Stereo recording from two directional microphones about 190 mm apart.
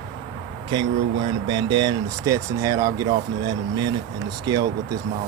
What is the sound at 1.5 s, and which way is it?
Speech, 25° right (ahead or behind).